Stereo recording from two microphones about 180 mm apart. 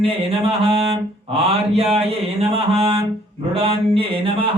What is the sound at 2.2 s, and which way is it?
Mantra, 35° right (ahead or behind).